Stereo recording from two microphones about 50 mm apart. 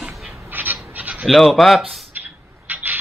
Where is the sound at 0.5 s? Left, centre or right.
Right.